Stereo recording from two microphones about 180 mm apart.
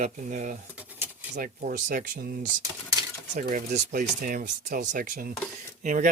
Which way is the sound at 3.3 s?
40° right (ahead or behind).